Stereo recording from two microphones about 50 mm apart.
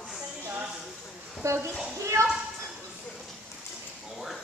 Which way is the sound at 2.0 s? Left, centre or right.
Right.